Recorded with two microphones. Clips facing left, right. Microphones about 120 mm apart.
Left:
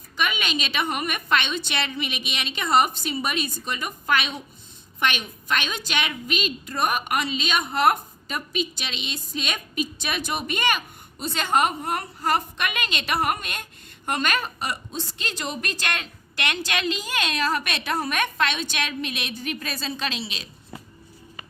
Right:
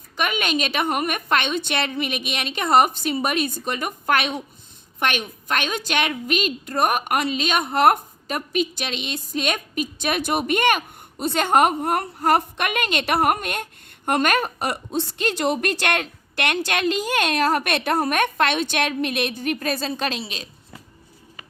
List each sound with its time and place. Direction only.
0.2 s a woman's voice: 50° right (ahead or behind)